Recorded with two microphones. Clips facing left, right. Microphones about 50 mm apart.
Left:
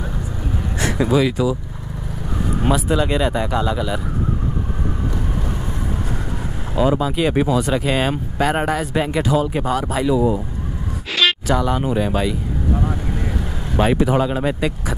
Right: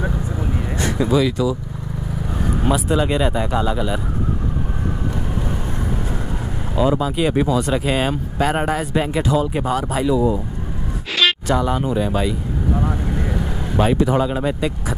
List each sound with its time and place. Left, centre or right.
0.7 s speech: centre
2.7 s speech: centre
7.0 s speech: centre
7.3 s speech: centre
7.6 s speech: centre
11.1 s a sound: centre
11.8 s speech: centre
12.7 s vehicle: centre
13.7 s speech: centre